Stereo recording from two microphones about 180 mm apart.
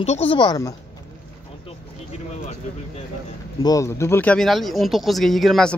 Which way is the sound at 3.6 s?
15° left (ahead or behind).